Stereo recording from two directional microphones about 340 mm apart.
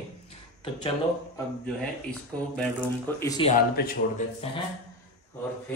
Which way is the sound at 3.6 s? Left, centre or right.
Left.